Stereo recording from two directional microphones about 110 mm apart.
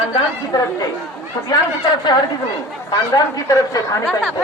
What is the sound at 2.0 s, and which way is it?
Speech, 40° left (ahead or behind).